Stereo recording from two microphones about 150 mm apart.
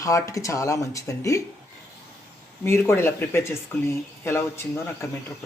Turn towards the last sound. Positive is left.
turn(degrees=15)  # may be behind; listen again after turning